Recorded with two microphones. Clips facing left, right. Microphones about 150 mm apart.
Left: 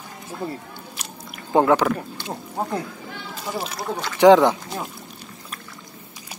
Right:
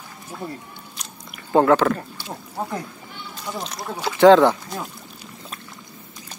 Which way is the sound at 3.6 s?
5° left (ahead or behind).